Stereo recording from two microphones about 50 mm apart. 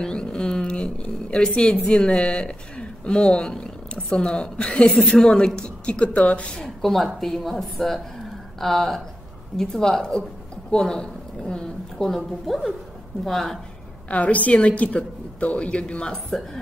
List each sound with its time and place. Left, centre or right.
0.0 s a sound: centre
1.9 s a woman's voice: centre
6.8 s a woman's voice: centre
12.2 s a woman's voice: centre
14.1 s a woman's voice: left